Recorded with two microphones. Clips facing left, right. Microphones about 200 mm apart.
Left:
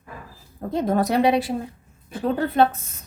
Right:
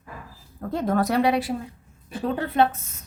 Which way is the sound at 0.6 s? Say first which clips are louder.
Left 2 dB; 20° left (ahead or behind).